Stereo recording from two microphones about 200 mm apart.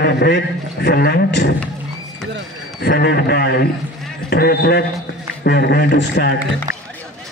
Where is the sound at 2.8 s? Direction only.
55° left (ahead or behind).